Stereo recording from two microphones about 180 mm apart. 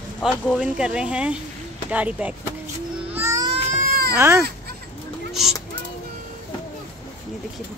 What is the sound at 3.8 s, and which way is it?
Baby cry, 55° right (ahead or behind).